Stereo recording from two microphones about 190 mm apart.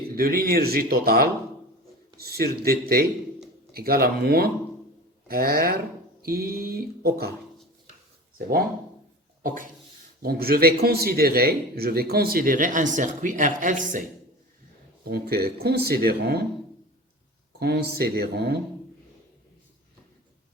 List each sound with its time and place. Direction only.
0.2 s speech: 50° right (ahead or behind)
10.2 s speech: 55° right (ahead or behind)
15.0 s speech: 55° right (ahead or behind)
18.0 s speech: 55° right (ahead or behind)